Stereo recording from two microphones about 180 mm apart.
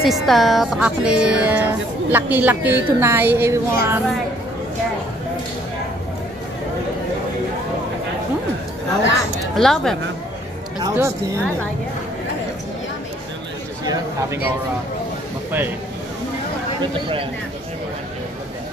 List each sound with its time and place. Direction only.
0.0 s speech: centre (ahead or behind)
9.6 s speech: centre (ahead or behind)
10.8 s speech: 15° right (ahead or behind)